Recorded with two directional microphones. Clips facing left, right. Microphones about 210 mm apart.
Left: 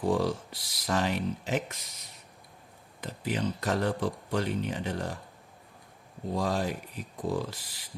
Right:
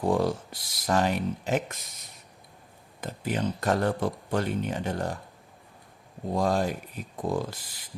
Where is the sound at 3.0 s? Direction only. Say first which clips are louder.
Right 2 dB; 50° right (ahead or behind).